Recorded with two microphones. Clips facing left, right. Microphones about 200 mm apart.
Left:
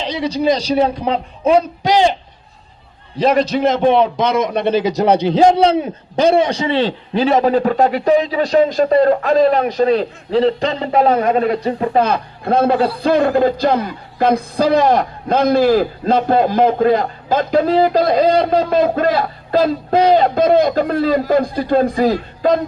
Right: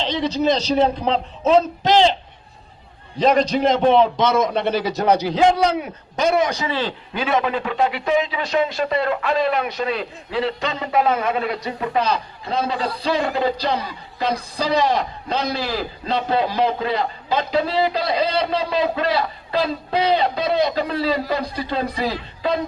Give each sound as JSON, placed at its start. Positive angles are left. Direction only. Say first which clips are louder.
{"t": 0.0, "sound": "a man's voice", "louder": "left 2 dB", "side_deg": 10}
{"t": 3.2, "sound": "a man's voice", "louder": "left 2 dB", "side_deg": 5}
{"t": 12.0, "sound": "a man's voice", "louder": "left 5 dB", "side_deg": 55}